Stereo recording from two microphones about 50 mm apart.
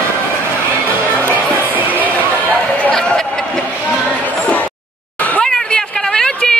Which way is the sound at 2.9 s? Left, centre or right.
Centre.